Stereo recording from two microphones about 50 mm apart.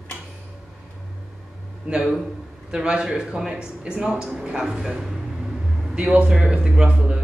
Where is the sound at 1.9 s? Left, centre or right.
Right.